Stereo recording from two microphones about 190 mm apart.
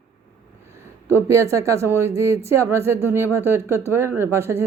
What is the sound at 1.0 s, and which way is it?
A woman's voice, 15° right (ahead or behind).